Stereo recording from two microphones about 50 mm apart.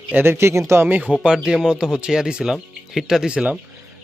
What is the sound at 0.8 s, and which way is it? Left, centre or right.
Speech, right.